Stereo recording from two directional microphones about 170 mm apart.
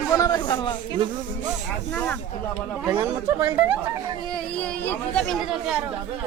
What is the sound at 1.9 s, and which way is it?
Speech, 10° left (ahead or behind).